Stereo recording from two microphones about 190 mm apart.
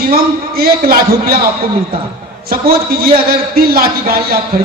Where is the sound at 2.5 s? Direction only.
50° right (ahead or behind).